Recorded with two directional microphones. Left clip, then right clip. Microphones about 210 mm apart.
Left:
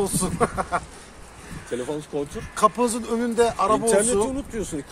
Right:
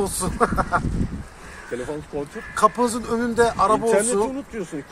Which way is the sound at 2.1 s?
20° left (ahead or behind).